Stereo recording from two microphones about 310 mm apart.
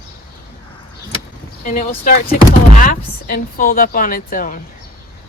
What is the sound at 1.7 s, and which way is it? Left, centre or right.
Speech, left.